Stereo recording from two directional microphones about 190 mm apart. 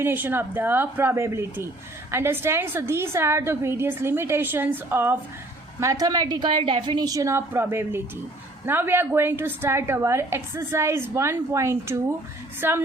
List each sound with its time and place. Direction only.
0.0 s a woman's voice: 10° right (ahead or behind)